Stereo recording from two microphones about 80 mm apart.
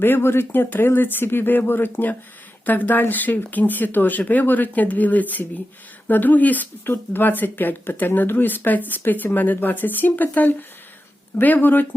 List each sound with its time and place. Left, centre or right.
0.0 s speech: left